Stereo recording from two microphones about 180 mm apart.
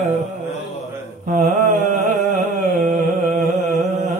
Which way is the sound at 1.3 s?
45° right (ahead or behind).